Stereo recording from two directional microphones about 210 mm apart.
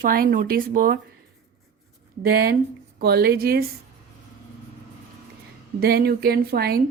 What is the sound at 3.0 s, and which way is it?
Speech, 50° right (ahead or behind).